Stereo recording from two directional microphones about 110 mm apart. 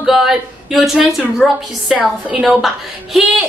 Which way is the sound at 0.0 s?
5° right (ahead or behind).